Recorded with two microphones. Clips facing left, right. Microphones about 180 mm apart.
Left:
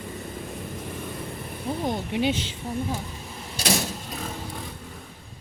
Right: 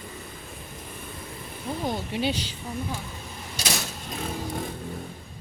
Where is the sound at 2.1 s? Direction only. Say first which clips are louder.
Left 3 dB; 20° left (ahead or behind).